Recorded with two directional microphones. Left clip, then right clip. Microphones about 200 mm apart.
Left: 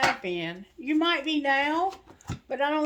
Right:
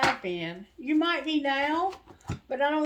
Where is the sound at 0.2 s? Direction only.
40° left (ahead or behind).